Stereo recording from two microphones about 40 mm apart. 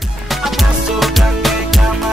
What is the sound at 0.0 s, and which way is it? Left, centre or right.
Music, centre.